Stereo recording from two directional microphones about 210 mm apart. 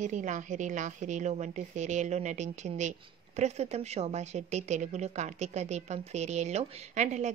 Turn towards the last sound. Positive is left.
turn(degrees=-35)  # may be behind; listen again after turning